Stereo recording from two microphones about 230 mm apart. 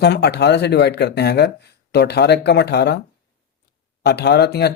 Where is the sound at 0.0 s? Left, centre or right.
Left.